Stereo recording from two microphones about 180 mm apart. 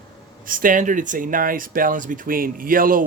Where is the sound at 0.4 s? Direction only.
50° right (ahead or behind).